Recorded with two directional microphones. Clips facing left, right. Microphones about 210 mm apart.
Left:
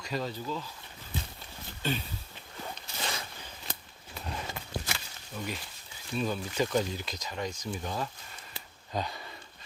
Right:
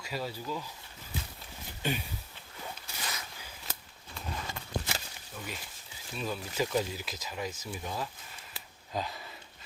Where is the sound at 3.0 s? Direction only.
30° left (ahead or behind).